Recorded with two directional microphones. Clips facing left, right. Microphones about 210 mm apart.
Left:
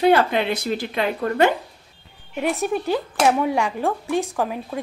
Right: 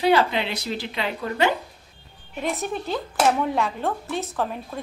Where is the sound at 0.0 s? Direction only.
50° left (ahead or behind).